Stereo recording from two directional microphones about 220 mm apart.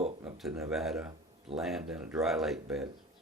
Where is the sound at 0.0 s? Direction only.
25° right (ahead or behind).